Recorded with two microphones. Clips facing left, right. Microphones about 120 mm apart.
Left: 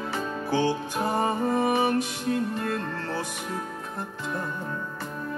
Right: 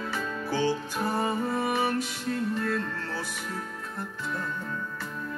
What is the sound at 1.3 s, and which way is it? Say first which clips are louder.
Music: left 4 dB; 45° left (ahead or behind).